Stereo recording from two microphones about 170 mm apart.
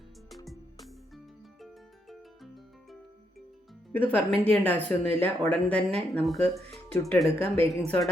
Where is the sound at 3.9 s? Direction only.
10° left (ahead or behind).